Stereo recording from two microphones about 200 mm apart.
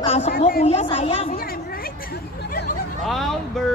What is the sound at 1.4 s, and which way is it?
Hubbub, 50° left (ahead or behind).